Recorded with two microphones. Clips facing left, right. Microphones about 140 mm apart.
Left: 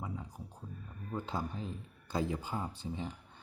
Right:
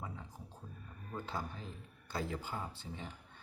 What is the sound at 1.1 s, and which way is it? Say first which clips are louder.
Speech: left 4 dB; 15° left (ahead or behind).